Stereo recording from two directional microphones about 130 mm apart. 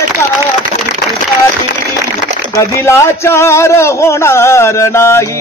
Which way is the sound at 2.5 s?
20° left (ahead or behind).